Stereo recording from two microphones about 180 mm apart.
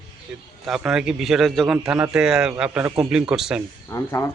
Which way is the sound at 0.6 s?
5° right (ahead or behind).